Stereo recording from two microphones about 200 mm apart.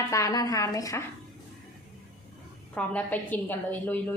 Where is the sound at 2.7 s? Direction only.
10° left (ahead or behind).